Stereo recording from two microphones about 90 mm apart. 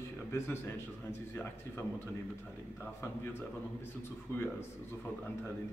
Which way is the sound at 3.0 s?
30° left (ahead or behind).